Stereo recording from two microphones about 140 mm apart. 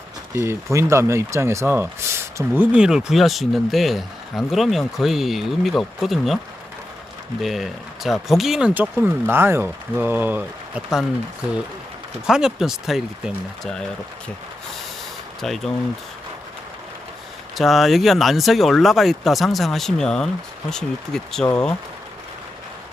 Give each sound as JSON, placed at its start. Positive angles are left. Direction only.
{"t": 0.3, "sound": "speech", "side_deg": -20}
{"t": 2.7, "sound": "speech", "side_deg": -5}
{"t": 7.4, "sound": "speech", "side_deg": 0}
{"t": 12.2, "sound": "speech", "side_deg": -5}
{"t": 15.4, "sound": "speech", "side_deg": 0}
{"t": 17.6, "sound": "speech", "side_deg": 0}